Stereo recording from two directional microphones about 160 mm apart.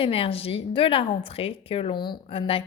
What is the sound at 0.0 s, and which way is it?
A woman's voice, 35° left (ahead or behind).